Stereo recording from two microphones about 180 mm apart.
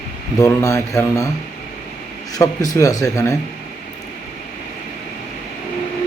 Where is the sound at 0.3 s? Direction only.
20° left (ahead or behind).